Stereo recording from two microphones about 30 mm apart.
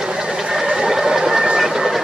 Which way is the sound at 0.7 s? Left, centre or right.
Centre.